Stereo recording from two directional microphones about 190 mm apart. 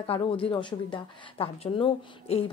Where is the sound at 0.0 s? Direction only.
30° left (ahead or behind).